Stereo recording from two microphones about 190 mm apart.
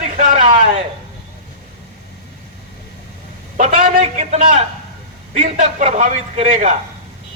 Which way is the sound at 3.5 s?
35° right (ahead or behind).